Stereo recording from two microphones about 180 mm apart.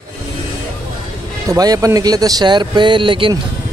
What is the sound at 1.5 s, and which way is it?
Speech, 20° right (ahead or behind).